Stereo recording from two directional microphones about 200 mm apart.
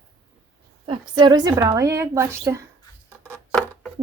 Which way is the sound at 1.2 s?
20° right (ahead or behind).